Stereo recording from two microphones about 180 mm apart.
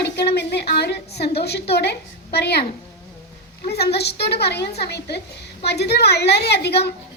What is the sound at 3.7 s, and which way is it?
A woman's voice, 65° left (ahead or behind).